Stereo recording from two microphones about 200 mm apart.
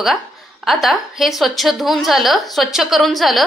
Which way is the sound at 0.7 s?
Centre (ahead or behind).